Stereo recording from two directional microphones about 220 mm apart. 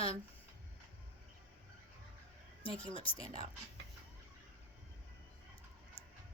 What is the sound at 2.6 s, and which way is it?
Speech, 25° left (ahead or behind).